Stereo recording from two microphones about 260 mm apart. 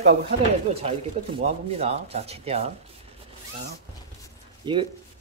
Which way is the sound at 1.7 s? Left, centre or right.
Right.